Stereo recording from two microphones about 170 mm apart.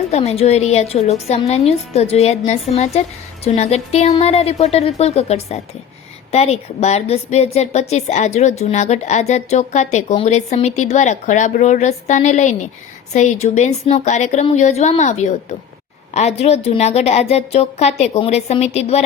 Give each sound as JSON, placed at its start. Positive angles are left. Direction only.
{"t": 0.1, "sound": "a woman's voice", "side_deg": 40}